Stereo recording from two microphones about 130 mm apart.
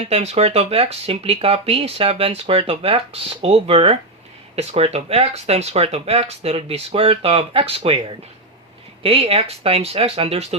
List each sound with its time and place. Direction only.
0.1 s speech: 55° right (ahead or behind)